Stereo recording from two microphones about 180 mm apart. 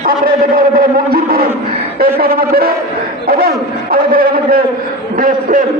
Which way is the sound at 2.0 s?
55° right (ahead or behind).